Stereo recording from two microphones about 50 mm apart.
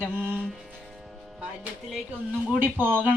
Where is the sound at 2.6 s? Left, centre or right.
Right.